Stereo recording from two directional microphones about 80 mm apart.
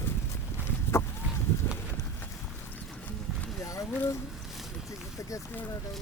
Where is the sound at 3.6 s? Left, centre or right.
Left.